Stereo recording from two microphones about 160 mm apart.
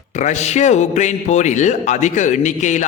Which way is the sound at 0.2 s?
45° left (ahead or behind).